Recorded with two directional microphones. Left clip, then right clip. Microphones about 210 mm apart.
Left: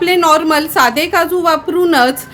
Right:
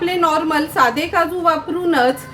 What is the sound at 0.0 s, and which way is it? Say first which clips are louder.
A woman's voice: left 6 dB; 50° left (ahead or behind).